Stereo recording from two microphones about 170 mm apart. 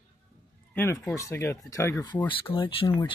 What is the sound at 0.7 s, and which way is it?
Speech, 10° left (ahead or behind).